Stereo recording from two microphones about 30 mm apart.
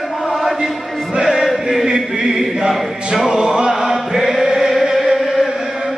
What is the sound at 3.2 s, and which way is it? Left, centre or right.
Choir, right.